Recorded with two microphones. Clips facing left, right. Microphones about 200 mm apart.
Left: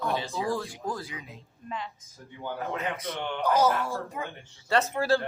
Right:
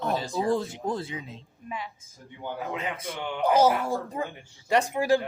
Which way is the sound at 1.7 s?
10° right (ahead or behind).